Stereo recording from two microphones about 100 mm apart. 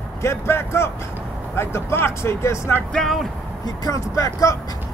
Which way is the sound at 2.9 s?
5° left (ahead or behind).